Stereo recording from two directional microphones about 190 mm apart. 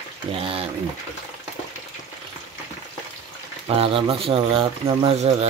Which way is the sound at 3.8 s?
30° right (ahead or behind).